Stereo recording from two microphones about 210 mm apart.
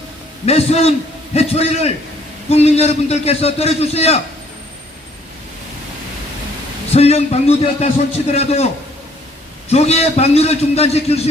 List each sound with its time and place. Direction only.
0.4 s a man's voice: 30° left (ahead or behind)
6.9 s a man's voice: 30° left (ahead or behind)